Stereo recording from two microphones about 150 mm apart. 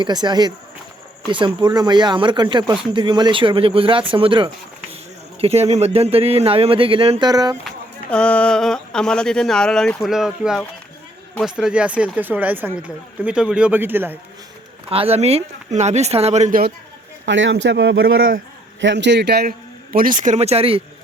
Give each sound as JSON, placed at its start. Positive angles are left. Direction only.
{"t": 0.0, "sound": "speech", "side_deg": -30}
{"t": 7.3, "sound": "speech", "side_deg": -25}
{"t": 8.1, "sound": "speech", "side_deg": 5}
{"t": 14.8, "sound": "speech", "side_deg": -40}
{"t": 18.0, "sound": "a man's voice", "side_deg": -85}